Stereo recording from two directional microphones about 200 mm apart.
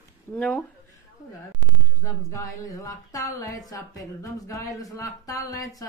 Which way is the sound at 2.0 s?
15° left (ahead or behind).